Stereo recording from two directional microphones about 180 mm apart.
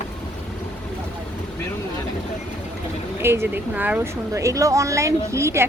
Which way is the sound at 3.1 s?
15° right (ahead or behind).